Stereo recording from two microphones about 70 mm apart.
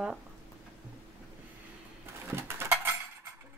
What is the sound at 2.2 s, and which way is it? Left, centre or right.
Bird, right.